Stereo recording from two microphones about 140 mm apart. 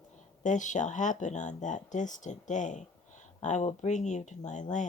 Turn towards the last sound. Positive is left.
turn(degrees=60)  # may be behind; listen again after turning